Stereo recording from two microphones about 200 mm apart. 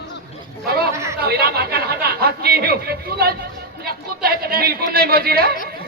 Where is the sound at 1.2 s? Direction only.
50° right (ahead or behind).